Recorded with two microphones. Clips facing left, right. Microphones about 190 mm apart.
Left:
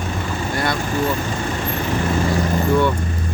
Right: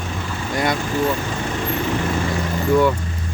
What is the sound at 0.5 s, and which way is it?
Speech, 15° right (ahead or behind).